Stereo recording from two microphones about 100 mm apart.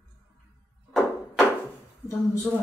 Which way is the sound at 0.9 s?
5° left (ahead or behind).